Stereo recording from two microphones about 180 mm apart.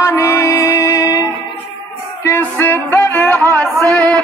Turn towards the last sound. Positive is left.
turn(degrees=5)  # may be behind; listen again after turning